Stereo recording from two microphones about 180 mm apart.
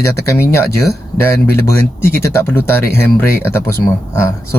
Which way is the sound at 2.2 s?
15° left (ahead or behind).